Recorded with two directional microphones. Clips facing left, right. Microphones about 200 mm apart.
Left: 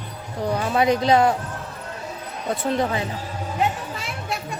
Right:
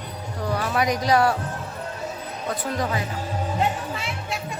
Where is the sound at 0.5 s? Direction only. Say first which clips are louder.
Left 4 dB; 25° left (ahead or behind).